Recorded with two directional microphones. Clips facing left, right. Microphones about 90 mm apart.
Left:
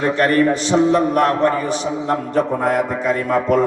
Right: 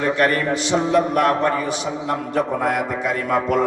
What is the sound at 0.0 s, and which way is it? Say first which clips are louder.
A man's voice: left 3 dB; 40° left (ahead or behind).